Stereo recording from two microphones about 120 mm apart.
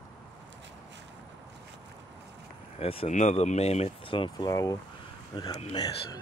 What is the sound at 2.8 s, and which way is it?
Speech, 50° left (ahead or behind).